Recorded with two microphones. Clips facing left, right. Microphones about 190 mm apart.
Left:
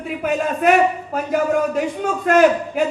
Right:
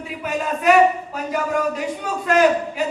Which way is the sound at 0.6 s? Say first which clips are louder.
Right 2 dB; 50° left (ahead or behind).